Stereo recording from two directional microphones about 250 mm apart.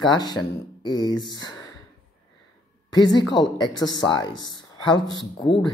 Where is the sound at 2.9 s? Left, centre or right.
Centre.